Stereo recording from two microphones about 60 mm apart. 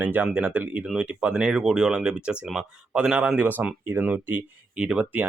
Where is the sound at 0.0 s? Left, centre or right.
Right.